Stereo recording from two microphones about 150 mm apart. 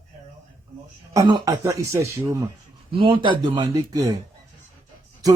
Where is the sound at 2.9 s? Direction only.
35° right (ahead or behind).